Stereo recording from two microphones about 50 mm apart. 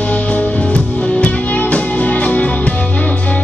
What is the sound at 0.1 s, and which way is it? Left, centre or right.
Music, left.